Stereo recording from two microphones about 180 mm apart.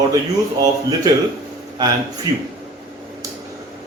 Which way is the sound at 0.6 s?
20° right (ahead or behind).